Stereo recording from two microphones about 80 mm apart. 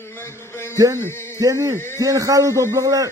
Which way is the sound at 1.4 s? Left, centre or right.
Right.